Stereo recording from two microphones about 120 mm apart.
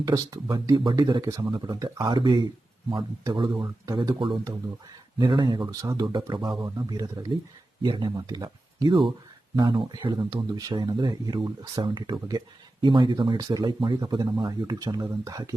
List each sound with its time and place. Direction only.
0.0 s speech: 35° right (ahead or behind)
2.0 s speech: 40° right (ahead or behind)